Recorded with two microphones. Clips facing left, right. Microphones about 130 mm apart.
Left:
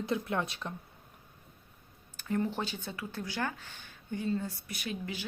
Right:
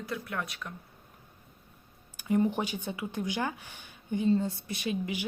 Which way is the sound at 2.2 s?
15° right (ahead or behind).